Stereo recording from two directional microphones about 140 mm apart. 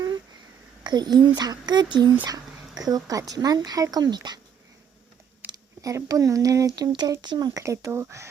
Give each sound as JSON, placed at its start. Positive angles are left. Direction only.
{"t": 0.9, "sound": "speech", "side_deg": -30}
{"t": 5.5, "sound": "speech", "side_deg": -25}